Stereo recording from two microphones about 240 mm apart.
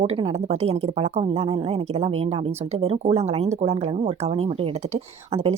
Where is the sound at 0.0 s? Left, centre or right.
Right.